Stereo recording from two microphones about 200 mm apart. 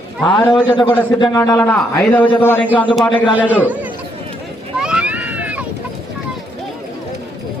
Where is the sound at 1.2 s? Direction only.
15° left (ahead or behind).